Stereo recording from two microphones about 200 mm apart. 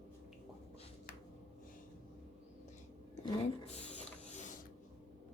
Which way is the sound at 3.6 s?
30° left (ahead or behind).